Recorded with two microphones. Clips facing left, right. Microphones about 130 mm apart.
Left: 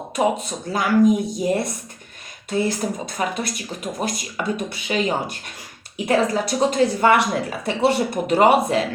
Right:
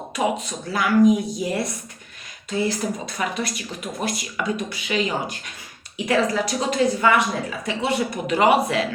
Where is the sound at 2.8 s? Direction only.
50° left (ahead or behind).